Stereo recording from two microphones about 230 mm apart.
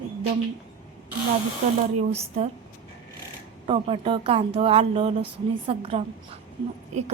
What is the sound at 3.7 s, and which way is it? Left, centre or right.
A woman's voice, right.